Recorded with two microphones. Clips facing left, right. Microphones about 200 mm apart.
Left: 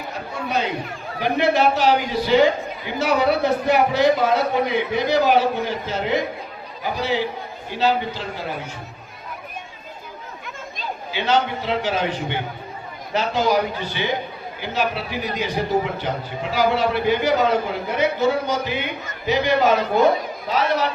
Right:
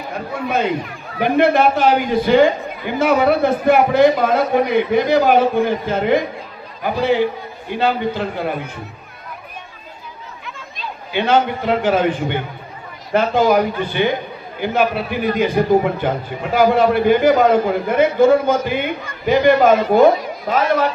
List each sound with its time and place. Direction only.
0.1 s a man's voice: 55° right (ahead or behind)
11.1 s a man's voice: 55° right (ahead or behind)